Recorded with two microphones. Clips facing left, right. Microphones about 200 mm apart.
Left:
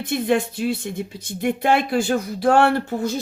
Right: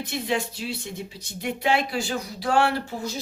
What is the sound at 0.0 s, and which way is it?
Speech, 55° left (ahead or behind).